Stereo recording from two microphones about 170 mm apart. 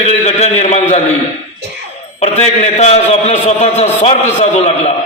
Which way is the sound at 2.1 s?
40° left (ahead or behind).